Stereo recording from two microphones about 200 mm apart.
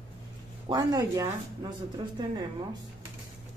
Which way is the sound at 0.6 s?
20° right (ahead or behind).